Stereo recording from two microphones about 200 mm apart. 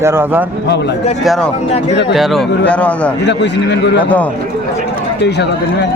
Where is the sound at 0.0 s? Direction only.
10° right (ahead or behind).